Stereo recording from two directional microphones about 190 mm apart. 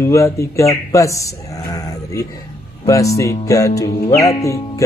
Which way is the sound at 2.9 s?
15° left (ahead or behind).